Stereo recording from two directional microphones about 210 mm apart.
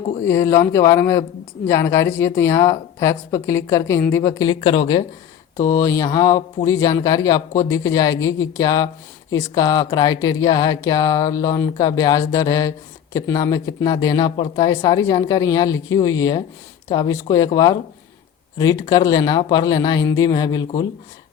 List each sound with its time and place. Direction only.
0.3 s speech: 15° left (ahead or behind)